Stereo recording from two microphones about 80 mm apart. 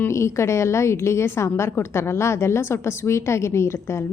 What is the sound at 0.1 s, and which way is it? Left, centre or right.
A woman's voice, left.